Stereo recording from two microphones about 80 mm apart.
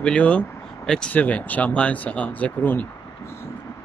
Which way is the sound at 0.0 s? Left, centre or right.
Centre.